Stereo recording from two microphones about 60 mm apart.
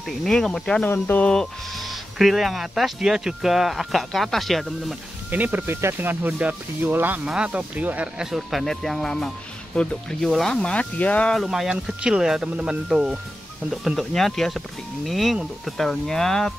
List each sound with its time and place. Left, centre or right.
0.2 s speech: centre
0.8 s speech: left
1.2 s music: centre
1.9 s speech: centre
5.3 s speech: right
7.2 s speech: centre
8.2 s speech: centre; by 11.2 s left
11.3 s speech: centre
13.8 s speech: centre